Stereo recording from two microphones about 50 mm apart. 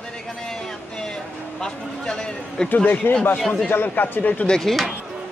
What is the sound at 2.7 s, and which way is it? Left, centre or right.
A man's voice, left.